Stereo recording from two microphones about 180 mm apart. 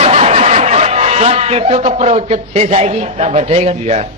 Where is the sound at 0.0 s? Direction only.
35° right (ahead or behind).